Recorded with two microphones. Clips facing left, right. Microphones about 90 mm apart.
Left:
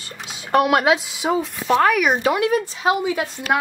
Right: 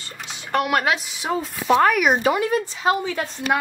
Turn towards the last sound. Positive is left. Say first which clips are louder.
# left 2 dB
turn(degrees=10)  # may be behind; listen again after turning